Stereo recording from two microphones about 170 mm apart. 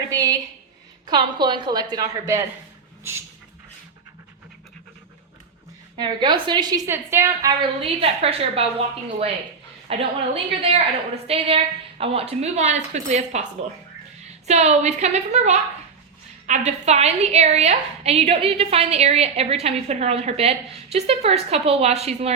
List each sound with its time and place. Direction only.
0.1 s a woman's voice: 20° right (ahead or behind)
3.0 s a sound: 15° right (ahead or behind)
6.0 s a woman's voice: 25° right (ahead or behind)
7.6 s a woman's voice: 35° right (ahead or behind)
10.0 s a woman's voice: 35° right (ahead or behind)
14.4 s a woman's voice: 40° right (ahead or behind)